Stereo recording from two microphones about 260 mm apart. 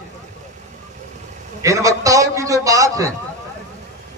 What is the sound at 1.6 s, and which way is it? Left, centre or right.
A man's voice, centre.